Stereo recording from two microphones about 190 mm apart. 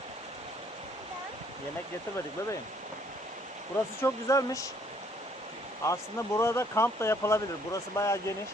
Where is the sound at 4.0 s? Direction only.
15° left (ahead or behind).